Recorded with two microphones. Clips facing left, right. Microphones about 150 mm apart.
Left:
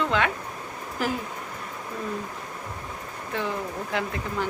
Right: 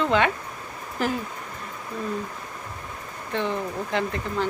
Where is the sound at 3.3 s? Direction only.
5° left (ahead or behind).